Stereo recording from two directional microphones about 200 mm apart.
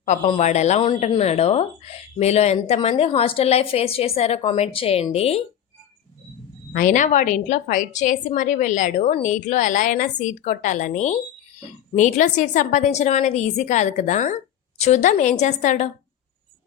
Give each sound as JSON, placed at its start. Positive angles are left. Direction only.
{"t": 0.3, "sound": "a woman's voice", "side_deg": 35}
{"t": 6.7, "sound": "a woman's voice", "side_deg": 40}